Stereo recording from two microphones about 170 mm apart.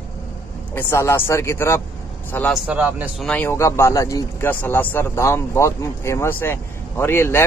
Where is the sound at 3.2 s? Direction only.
10° left (ahead or behind).